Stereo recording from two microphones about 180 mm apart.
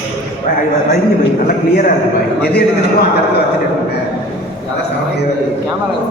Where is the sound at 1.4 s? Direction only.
55° left (ahead or behind).